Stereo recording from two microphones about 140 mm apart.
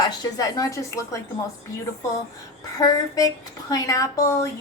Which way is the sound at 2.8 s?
25° left (ahead or behind).